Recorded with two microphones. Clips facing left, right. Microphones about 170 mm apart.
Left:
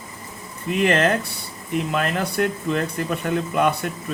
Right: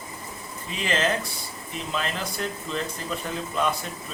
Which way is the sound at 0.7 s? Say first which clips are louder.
Left 7 dB; 60° left (ahead or behind).